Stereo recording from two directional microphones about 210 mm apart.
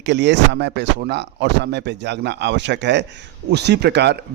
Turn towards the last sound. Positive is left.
turn(degrees=-55)  # may be behind; listen again after turning